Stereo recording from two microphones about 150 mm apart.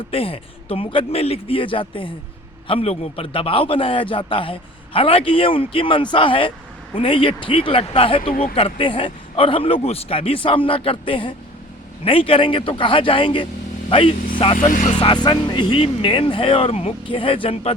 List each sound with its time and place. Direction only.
0.1 s a man's voice: 40° left (ahead or behind)
14.7 s speech: 60° left (ahead or behind)
14.9 s a man's voice: 30° left (ahead or behind)